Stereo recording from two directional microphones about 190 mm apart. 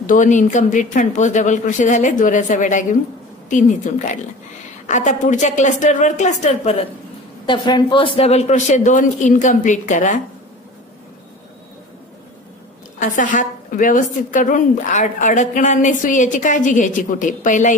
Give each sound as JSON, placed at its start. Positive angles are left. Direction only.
{"t": 0.0, "sound": "speech", "side_deg": 40}
{"t": 7.4, "sound": "speech", "side_deg": 25}
{"t": 13.0, "sound": "a woman's voice", "side_deg": 45}